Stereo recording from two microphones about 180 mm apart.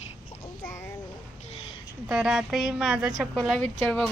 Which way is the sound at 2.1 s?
5° right (ahead or behind).